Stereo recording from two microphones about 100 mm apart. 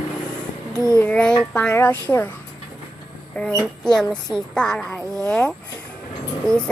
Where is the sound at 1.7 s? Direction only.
20° left (ahead or behind).